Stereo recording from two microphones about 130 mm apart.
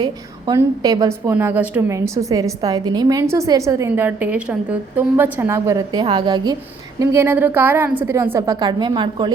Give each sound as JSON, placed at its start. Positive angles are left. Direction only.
{"t": 0.0, "sound": "a woman's voice", "side_deg": -30}
{"t": 7.0, "sound": "a woman's voice", "side_deg": -20}